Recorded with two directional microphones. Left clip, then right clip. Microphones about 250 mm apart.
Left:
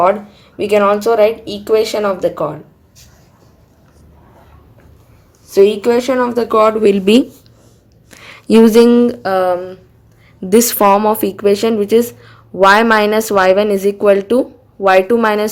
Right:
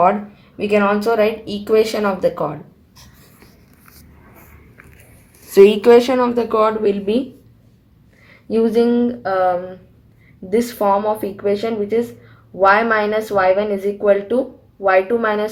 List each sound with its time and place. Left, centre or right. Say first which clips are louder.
0.0 s speech: left 2 dB; centre
5.5 s speech: right 2 dB; centre
6.3 s speech: left 4 dB; centre
6.6 s speech: left 7 dB; left
8.2 s speech: left 8 dB; left